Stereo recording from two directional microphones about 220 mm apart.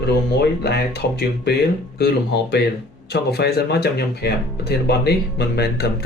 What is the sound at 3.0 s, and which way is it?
Speech, 45° left (ahead or behind).